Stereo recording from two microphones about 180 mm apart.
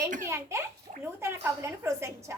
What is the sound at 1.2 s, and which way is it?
A woman's voice, 15° right (ahead or behind).